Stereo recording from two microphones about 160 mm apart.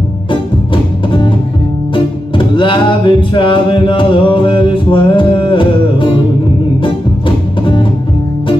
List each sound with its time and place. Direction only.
2.3 s music: 30° left (ahead or behind)